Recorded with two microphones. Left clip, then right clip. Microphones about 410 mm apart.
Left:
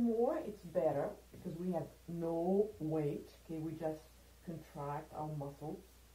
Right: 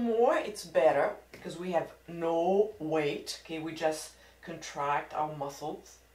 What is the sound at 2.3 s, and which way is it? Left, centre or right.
Speech, centre.